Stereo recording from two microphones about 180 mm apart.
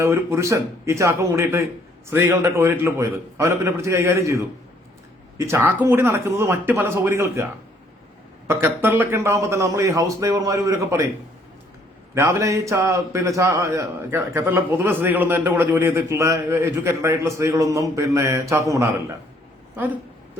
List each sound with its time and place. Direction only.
0.0 s a man's voice: 15° right (ahead or behind)
5.5 s a man's voice: 15° right (ahead or behind)
8.4 s a man's voice: 10° right (ahead or behind)
12.1 s a man's voice: 15° right (ahead or behind)